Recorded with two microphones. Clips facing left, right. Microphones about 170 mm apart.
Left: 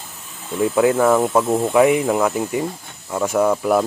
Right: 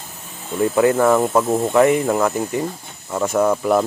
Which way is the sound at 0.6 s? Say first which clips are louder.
Even; centre (ahead or behind).